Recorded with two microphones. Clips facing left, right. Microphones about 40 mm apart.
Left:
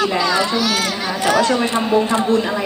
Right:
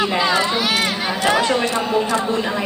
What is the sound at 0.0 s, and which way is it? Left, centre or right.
A child's voice, right.